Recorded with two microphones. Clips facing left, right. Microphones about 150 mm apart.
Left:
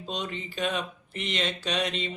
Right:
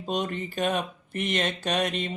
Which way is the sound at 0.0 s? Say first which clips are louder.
Right 5 dB; 50° right (ahead or behind).